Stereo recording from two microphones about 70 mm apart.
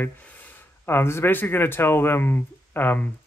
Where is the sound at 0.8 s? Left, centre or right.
Left.